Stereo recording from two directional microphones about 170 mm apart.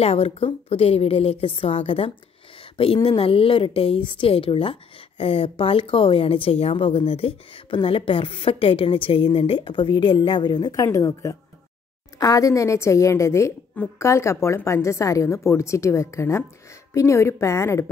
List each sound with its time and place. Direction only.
0.0 s a woman's voice: 35° left (ahead or behind); by 17.8 s 15° left (ahead or behind)